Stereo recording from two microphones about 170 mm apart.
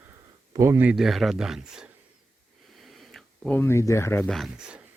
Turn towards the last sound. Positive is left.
turn(degrees=-5)  # may be behind; listen again after turning